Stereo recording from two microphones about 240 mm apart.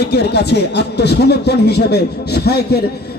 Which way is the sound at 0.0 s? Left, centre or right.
Left.